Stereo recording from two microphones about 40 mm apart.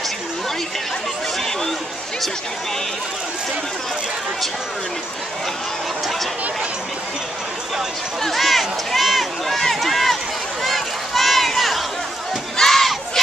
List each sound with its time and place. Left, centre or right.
8.2 s run: centre
10.6 s a sound: centre
12.5 s crowd: centre